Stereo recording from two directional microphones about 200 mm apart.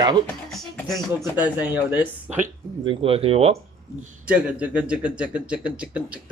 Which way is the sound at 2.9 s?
30° right (ahead or behind).